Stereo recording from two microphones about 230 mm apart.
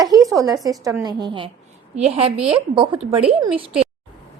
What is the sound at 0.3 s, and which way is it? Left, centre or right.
A woman's voice, centre.